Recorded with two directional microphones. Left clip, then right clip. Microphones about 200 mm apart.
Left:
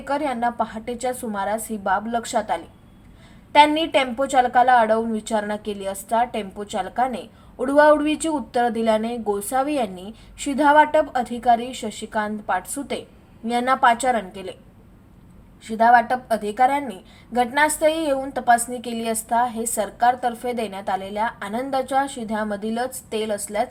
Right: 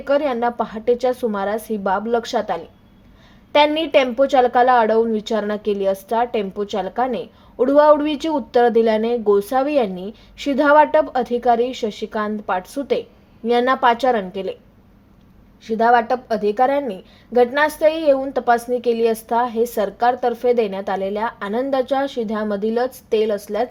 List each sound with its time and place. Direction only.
0.0 s a woman's voice: 40° right (ahead or behind)
15.6 s a woman's voice: 40° right (ahead or behind)